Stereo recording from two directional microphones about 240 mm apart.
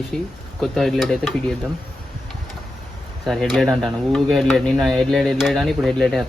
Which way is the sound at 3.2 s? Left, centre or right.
Centre.